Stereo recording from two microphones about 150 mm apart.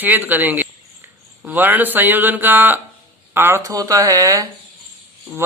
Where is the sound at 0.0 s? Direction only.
10° right (ahead or behind).